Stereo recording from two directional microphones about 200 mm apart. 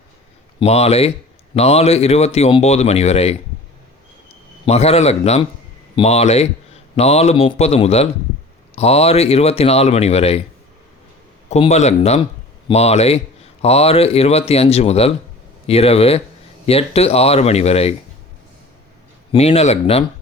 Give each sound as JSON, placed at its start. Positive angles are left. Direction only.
{"t": 0.6, "sound": "speech", "side_deg": 30}
{"t": 4.6, "sound": "speech", "side_deg": 30}
{"t": 11.4, "sound": "speech", "side_deg": 35}
{"t": 19.3, "sound": "speech", "side_deg": 30}